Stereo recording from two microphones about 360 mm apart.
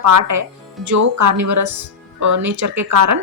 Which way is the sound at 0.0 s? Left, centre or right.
Right.